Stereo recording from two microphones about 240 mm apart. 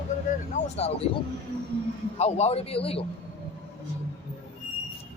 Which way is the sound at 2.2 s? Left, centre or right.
Left.